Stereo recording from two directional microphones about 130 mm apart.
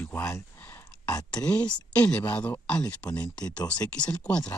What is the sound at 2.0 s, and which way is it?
Speech, 10° left (ahead or behind).